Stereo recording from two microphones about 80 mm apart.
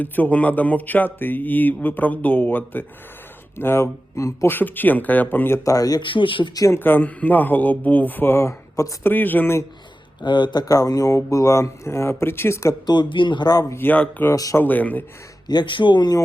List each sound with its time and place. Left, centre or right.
0.0 s speech: left
4.5 s speech: left
5.6 s speech: left
6.0 s speech: left
6.5 s speech: left
6.7 s speech: left
9.0 s speech: left
10.2 s speech: left
12.8 s speech: left
13.7 s speech: left
13.9 s speech: centre
15.4 s speech: left